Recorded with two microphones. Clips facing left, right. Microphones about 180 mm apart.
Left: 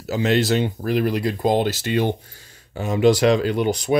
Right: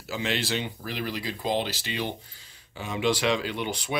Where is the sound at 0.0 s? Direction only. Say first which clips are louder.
Left 10 dB; 40° left (ahead or behind).